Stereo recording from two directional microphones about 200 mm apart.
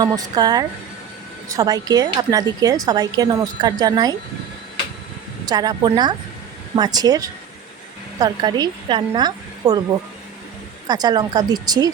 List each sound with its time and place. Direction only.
0.0 s a woman's voice: 20° right (ahead or behind)
5.5 s a woman's voice: 20° right (ahead or behind)
10.8 s a woman's voice: 20° right (ahead or behind)